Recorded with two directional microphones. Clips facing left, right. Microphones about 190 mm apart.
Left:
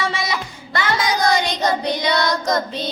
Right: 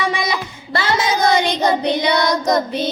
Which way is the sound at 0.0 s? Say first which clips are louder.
Right 3 dB; 15° right (ahead or behind).